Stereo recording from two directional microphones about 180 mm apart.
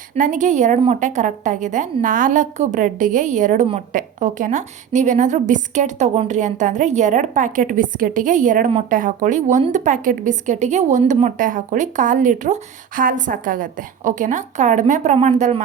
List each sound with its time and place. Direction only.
0.2 s a woman's voice: 45° right (ahead or behind)